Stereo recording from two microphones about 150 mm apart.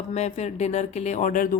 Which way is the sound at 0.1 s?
45° left (ahead or behind).